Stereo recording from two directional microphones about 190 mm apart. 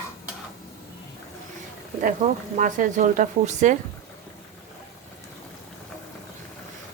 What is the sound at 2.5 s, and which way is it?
A woman's voice, 40° right (ahead or behind).